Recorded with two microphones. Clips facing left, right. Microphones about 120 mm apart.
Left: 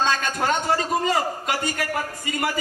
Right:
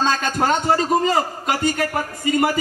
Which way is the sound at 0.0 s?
30° right (ahead or behind).